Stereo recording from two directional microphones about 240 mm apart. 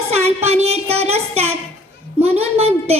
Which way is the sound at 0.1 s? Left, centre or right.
Right.